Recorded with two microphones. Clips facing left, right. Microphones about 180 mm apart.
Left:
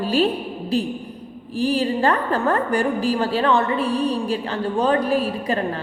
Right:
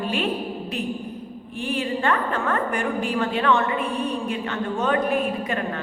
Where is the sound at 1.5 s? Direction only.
35° left (ahead or behind).